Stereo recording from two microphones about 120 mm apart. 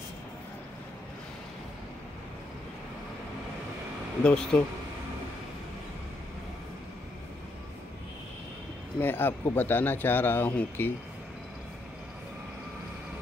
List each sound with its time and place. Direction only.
4.2 s speech: 5° left (ahead or behind)
9.0 s speech: 15° left (ahead or behind)